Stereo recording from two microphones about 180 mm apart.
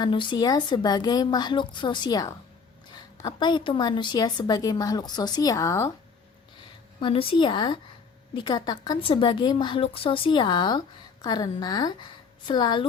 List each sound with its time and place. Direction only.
0.0 s a woman's voice: 25° left (ahead or behind)
7.0 s a woman's voice: 30° left (ahead or behind)